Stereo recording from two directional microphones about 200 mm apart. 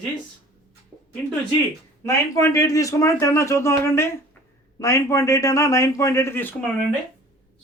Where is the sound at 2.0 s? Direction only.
15° left (ahead or behind).